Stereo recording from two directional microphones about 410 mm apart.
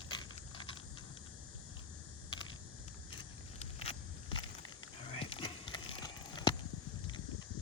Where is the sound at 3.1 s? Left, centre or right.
Centre.